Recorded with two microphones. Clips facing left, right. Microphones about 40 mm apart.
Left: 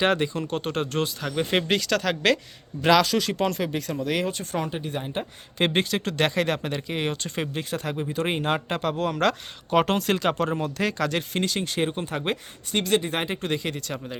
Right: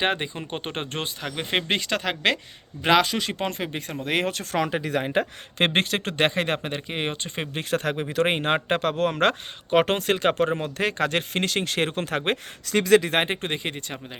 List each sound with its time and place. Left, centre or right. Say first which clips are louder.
0.0 s speech: left 3 dB; right
0.6 s speech: left 4 dB; right
5.5 s speech: right 1 dB; right
7.5 s speech: right 3 dB; right